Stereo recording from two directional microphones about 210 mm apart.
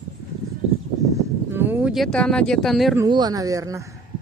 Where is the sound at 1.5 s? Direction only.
10° right (ahead or behind).